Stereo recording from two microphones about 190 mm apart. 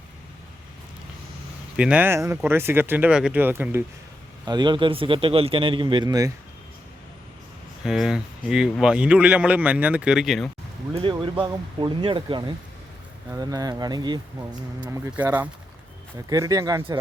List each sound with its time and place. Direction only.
1.7 s speech: 5° right (ahead or behind)
4.4 s a man's voice: 25° right (ahead or behind)
7.9 s speech: 5° right (ahead or behind)
10.9 s a man's voice: 25° right (ahead or behind)